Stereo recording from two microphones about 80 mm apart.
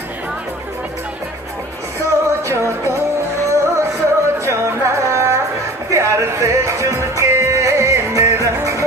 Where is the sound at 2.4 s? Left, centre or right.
Right.